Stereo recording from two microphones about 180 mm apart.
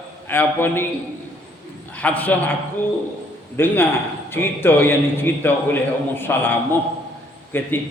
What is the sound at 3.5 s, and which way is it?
A man's voice, 10° left (ahead or behind).